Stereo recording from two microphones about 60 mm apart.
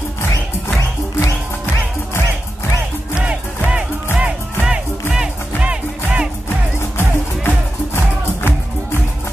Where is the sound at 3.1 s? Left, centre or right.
Centre.